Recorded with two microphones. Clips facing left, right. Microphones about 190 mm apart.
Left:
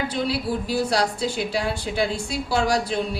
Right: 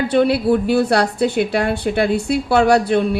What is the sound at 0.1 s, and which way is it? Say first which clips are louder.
A woman's voice: right 10 dB; 60° right (ahead or behind).